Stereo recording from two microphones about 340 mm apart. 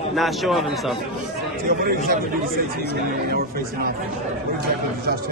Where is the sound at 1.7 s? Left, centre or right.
Right.